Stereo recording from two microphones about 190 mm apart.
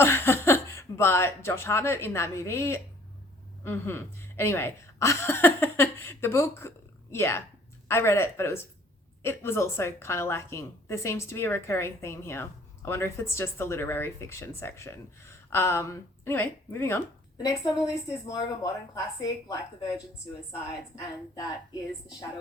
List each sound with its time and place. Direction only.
0.0 s a woman's voice: 10° left (ahead or behind)